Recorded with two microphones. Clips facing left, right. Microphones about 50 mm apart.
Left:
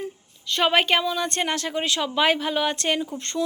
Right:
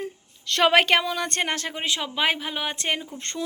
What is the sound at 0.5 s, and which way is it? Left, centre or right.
Speech, right.